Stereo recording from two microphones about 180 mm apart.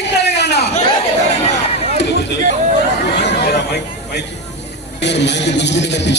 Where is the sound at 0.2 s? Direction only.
70° left (ahead or behind).